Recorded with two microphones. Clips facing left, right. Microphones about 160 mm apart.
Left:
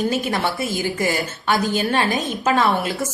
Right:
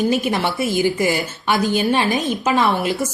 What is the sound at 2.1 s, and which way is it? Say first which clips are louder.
Speech: right 3 dB; centre (ahead or behind).